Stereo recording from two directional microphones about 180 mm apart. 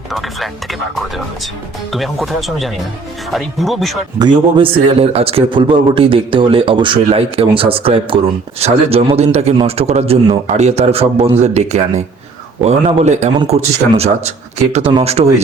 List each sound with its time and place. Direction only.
0.1 s speech: centre (ahead or behind)
4.2 s a man's voice: 30° right (ahead or behind)